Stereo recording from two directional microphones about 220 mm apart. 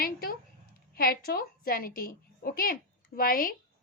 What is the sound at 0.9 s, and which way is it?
A woman's voice, 40° left (ahead or behind).